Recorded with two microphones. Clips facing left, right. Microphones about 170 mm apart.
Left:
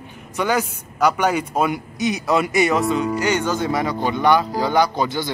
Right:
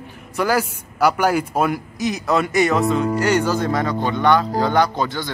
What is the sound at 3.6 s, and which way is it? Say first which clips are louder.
Speech: right 1 dB; 10° left (ahead or behind).